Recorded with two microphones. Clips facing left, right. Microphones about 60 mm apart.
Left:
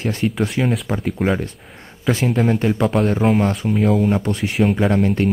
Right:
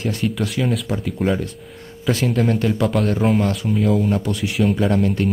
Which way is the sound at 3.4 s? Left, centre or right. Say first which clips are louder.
Left 2 dB; left.